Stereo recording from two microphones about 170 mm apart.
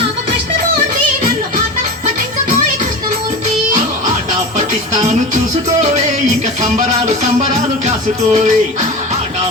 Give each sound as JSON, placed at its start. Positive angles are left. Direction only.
{"t": 5.8, "sound": "music", "side_deg": -45}